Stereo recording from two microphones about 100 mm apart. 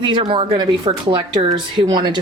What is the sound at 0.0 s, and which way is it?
Speech, 50° right (ahead or behind).